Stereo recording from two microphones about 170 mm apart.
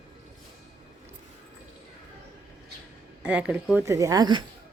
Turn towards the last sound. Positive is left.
turn(degrees=-25)  # may be behind; listen again after turning